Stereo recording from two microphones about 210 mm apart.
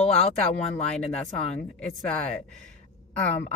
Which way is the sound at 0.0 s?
30° left (ahead or behind).